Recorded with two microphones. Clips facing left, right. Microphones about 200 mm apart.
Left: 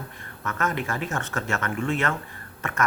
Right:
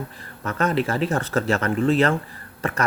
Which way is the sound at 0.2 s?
30° right (ahead or behind).